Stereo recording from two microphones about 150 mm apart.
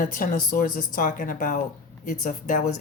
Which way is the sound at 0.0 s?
65° left (ahead or behind).